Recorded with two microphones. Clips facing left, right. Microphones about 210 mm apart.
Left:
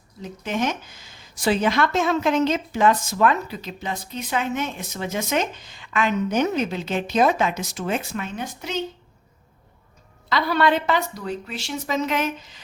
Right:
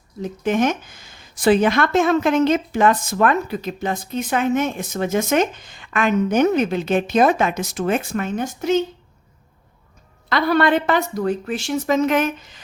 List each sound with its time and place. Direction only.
0.2 s speech: 50° right (ahead or behind)
10.2 s speech: 55° right (ahead or behind)